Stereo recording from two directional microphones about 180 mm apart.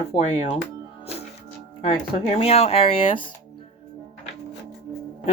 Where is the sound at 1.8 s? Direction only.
30° left (ahead or behind).